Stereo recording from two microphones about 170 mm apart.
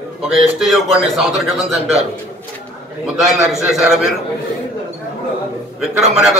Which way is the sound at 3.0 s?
5° right (ahead or behind).